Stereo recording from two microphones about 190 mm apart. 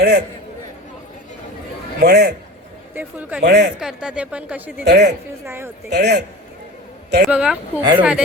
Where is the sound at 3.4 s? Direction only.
60° right (ahead or behind).